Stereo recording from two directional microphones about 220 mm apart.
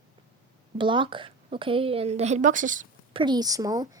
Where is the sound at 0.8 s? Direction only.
20° right (ahead or behind).